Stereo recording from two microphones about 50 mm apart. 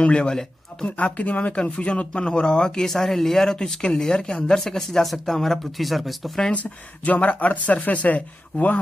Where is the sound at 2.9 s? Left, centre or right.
Centre.